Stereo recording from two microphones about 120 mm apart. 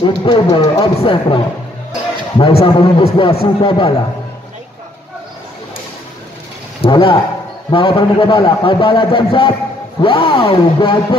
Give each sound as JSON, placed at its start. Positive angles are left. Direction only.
{"t": 0.0, "sound": "a man's voice", "side_deg": 45}
{"t": 6.8, "sound": "a man's voice", "side_deg": 45}